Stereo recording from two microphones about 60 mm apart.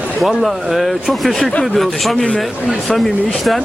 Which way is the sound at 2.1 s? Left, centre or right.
Centre.